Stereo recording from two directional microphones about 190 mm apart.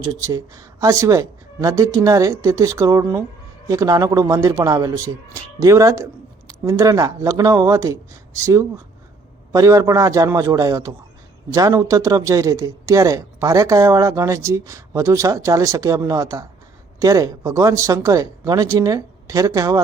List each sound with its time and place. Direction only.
0.0 s speech: 15° right (ahead or behind)